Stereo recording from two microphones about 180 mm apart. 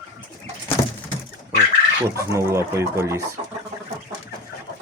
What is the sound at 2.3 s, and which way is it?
Speech, 15° right (ahead or behind).